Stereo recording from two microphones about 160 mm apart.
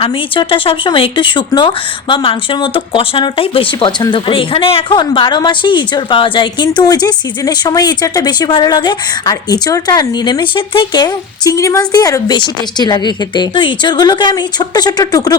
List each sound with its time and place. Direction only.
0.0 s speech: 35° left (ahead or behind)